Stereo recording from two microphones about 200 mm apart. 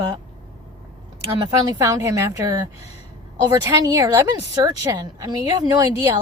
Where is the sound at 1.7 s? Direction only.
15° right (ahead or behind).